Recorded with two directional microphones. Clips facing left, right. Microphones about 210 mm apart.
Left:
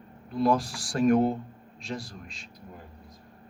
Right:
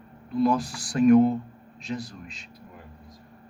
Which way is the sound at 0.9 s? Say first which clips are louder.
Right 5 dB; 45° left (ahead or behind).